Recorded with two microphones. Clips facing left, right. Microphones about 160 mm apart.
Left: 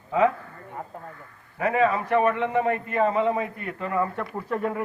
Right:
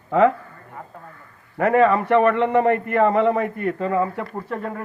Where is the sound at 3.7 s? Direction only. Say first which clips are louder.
Right 3 dB; 30° right (ahead or behind).